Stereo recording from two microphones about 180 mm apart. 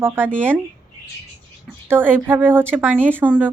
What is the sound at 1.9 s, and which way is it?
Speech, 10° right (ahead or behind).